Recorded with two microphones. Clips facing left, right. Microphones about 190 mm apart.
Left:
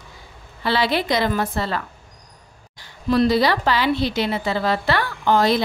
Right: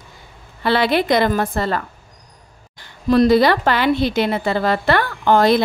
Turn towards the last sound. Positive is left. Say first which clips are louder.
# right 4 dB
turn(degrees=-55)  # may be behind; listen again after turning